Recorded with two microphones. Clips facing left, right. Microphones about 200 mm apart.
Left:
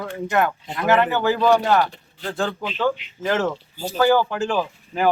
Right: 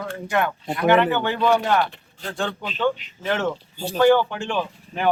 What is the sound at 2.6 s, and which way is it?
Speech, 40° right (ahead or behind).